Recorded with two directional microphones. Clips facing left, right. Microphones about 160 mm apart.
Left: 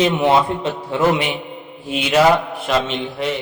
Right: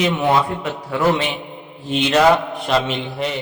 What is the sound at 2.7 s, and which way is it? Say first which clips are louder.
Speech: even; centre (ahead or behind).